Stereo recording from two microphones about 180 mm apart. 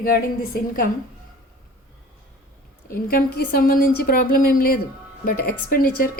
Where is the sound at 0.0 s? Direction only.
55° left (ahead or behind).